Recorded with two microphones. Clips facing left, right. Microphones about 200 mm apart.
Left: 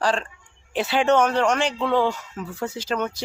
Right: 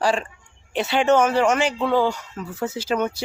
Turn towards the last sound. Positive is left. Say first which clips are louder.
# right 3 dB
turn(degrees=-10)  # may be behind; listen again after turning